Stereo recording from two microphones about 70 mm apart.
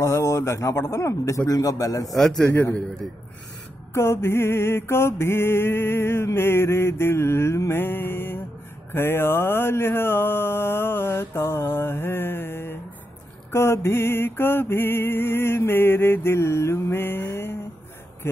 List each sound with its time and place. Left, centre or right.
0.0 s a man's voice: left
1.5 s a man's voice: left
2.1 s a man's voice: centre
2.4 s a man's voice: left
3.9 s mantra: left
18.2 s speech: left